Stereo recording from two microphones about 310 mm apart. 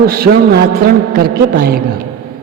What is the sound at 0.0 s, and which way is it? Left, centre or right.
A man's voice, right.